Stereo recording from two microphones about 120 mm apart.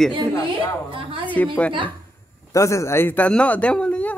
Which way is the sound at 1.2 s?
15° left (ahead or behind).